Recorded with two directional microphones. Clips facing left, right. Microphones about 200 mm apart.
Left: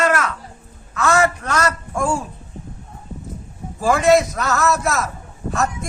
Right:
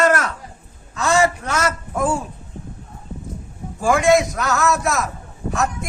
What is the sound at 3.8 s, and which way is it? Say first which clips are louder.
A man's voice: left 1 dB; centre (ahead or behind).